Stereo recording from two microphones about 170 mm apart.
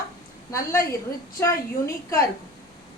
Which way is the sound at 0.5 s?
15° left (ahead or behind).